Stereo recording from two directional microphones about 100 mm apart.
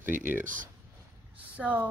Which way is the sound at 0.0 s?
20° right (ahead or behind).